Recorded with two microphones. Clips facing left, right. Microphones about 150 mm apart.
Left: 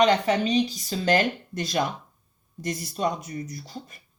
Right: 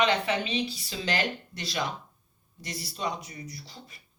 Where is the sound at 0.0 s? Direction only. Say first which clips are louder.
Left 6 dB; 40° left (ahead or behind).